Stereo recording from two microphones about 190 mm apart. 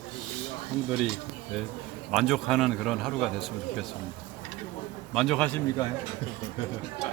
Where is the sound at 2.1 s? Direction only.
Centre (ahead or behind).